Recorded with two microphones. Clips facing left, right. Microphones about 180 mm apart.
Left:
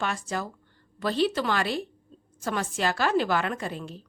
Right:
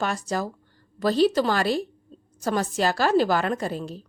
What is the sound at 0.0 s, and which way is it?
A woman's voice, 40° right (ahead or behind).